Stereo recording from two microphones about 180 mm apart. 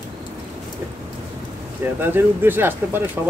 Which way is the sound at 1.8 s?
10° right (ahead or behind).